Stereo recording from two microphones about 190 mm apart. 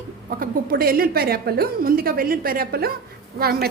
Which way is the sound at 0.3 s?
50° right (ahead or behind).